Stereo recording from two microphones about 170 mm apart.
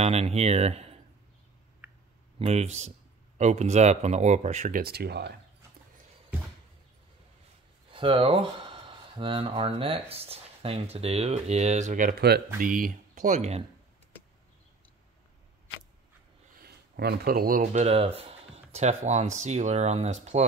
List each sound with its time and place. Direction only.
0.0 s speech: 35° right (ahead or behind)
2.3 s speech: 40° right (ahead or behind); by 5.3 s 70° right (ahead or behind)
7.9 s speech: 35° right (ahead or behind); by 12.4 s 65° right (ahead or behind)
12.5 s speech: 55° right (ahead or behind)
16.5 s a sound: 65° right (ahead or behind)
17.6 s speech: 40° right (ahead or behind)